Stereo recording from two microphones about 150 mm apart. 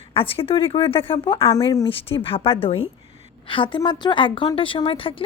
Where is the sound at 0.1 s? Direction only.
40° left (ahead or behind).